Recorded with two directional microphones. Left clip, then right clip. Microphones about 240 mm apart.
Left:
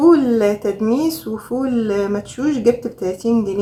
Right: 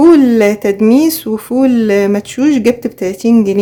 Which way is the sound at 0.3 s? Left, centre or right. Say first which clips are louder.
Right 6 dB; right.